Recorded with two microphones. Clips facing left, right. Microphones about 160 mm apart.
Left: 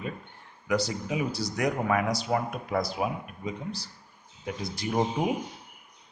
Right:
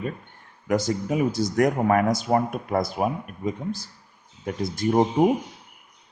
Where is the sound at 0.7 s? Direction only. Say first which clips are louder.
Right 5 dB; 45° right (ahead or behind).